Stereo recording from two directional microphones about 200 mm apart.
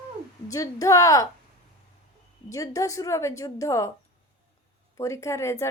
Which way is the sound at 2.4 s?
15° left (ahead or behind).